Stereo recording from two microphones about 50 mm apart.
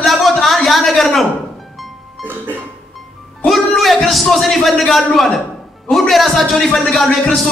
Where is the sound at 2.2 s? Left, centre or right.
Right.